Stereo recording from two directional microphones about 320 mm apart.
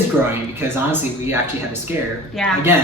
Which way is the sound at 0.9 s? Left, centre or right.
Centre.